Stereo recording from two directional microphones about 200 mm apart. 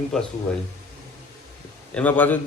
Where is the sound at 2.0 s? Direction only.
10° left (ahead or behind).